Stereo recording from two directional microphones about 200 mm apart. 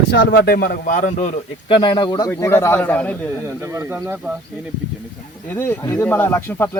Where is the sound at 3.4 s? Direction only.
15° right (ahead or behind).